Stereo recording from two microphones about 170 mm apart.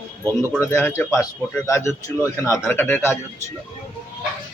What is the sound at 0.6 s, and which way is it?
Speech, 15° left (ahead or behind).